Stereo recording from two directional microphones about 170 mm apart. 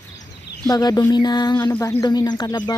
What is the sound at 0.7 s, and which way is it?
Speech, 25° left (ahead or behind).